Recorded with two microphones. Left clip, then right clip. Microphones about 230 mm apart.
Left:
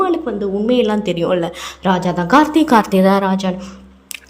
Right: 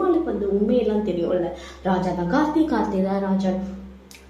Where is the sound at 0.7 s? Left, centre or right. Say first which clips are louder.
Left 6 dB; left.